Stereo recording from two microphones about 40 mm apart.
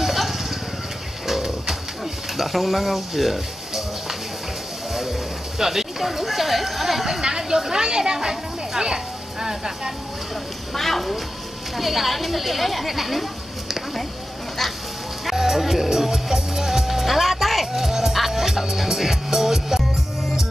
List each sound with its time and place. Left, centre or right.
0.0 s vehicle: centre
1.2 s bird: centre
2.3 s speech: centre
5.6 s speech: centre
7.2 s speech: centre
10.7 s speech: centre
15.2 s music: centre